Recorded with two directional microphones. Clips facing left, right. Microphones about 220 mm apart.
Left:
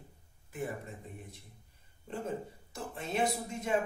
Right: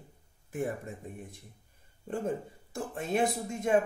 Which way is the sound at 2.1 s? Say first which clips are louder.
Right 4 dB; 45° right (ahead or behind).